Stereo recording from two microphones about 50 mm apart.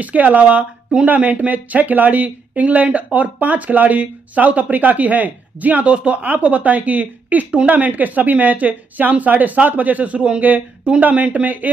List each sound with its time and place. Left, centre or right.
0.0 s speech: right